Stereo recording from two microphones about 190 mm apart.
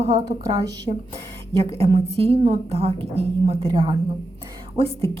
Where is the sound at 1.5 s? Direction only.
30° right (ahead or behind).